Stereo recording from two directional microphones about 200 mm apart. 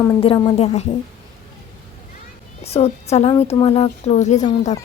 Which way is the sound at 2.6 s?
30° left (ahead or behind).